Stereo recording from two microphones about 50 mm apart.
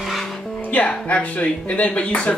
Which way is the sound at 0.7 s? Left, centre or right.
Left.